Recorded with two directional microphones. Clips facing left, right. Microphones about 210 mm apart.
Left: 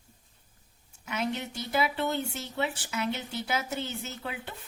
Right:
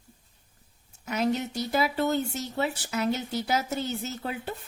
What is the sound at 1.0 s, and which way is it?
Speech, 40° right (ahead or behind).